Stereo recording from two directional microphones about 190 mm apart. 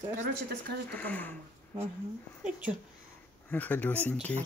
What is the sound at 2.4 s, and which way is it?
Speech, 5° right (ahead or behind).